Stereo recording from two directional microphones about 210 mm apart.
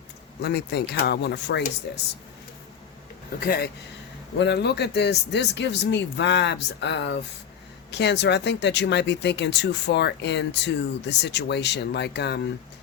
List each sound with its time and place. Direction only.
0.4 s speech: 50° left (ahead or behind)
3.4 s speech: 45° left (ahead or behind)